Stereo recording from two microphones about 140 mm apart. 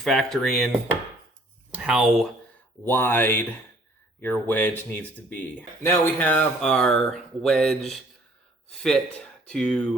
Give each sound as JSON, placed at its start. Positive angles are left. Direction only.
{"t": 0.0, "sound": "speech", "side_deg": 0}
{"t": 1.7, "sound": "speech", "side_deg": -5}
{"t": 2.8, "sound": "speech", "side_deg": 15}